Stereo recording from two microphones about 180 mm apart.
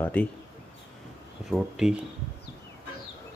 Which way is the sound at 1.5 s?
Centre (ahead or behind).